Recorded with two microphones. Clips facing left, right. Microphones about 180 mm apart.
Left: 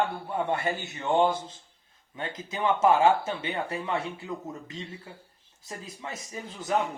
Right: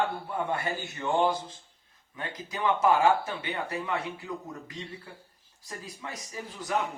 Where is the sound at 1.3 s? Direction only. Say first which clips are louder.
Even; 25° left (ahead or behind).